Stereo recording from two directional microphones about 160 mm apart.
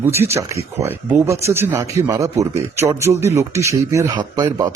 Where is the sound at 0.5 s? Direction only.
20° right (ahead or behind).